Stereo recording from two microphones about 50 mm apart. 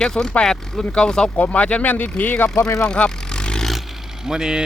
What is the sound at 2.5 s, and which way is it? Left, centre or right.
Speech, left.